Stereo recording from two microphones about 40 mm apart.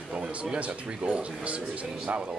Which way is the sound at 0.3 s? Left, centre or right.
Right.